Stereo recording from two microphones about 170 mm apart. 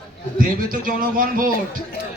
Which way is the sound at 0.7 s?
55° right (ahead or behind).